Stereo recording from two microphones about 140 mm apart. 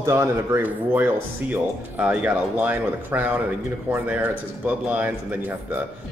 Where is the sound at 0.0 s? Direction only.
20° right (ahead or behind).